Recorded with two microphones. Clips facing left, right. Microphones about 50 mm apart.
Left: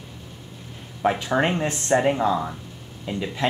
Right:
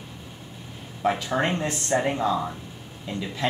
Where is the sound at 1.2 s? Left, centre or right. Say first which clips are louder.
Left 3 dB; left.